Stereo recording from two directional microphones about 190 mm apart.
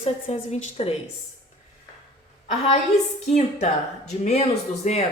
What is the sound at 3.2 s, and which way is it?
Speech, 35° left (ahead or behind).